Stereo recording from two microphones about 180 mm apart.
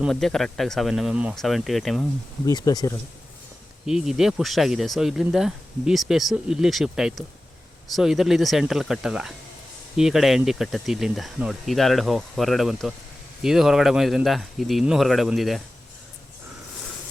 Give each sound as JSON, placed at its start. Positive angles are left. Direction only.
{"t": 0.0, "sound": "speech", "side_deg": 0}
{"t": 2.5, "sound": "speech", "side_deg": 20}
{"t": 3.8, "sound": "speech", "side_deg": -5}